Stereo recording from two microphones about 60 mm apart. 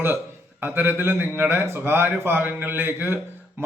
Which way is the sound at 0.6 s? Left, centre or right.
Right.